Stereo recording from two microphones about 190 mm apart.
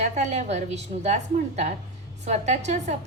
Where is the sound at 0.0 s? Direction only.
35° right (ahead or behind).